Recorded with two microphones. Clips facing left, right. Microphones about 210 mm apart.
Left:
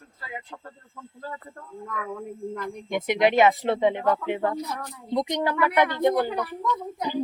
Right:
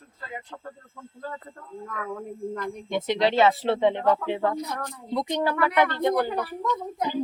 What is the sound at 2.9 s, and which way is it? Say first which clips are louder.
Speech: left 2 dB; 15° left (ahead or behind).